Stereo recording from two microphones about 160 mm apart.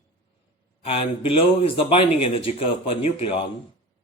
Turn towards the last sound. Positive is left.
turn(degrees=40)  # may be behind; listen again after turning